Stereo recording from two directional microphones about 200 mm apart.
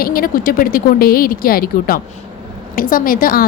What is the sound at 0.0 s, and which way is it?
A woman's voice, 45° left (ahead or behind).